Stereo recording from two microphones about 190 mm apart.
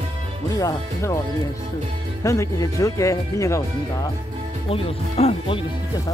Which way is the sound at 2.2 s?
15° left (ahead or behind).